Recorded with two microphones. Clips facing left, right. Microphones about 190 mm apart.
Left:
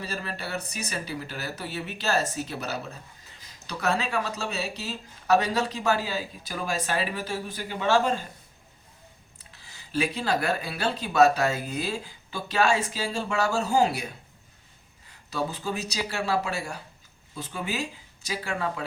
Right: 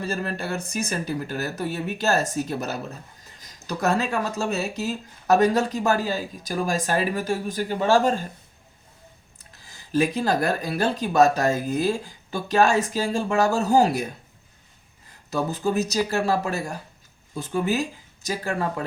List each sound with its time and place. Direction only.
0.0 s speech: 50° right (ahead or behind)
9.4 s speech: 45° right (ahead or behind)
15.3 s speech: 45° right (ahead or behind)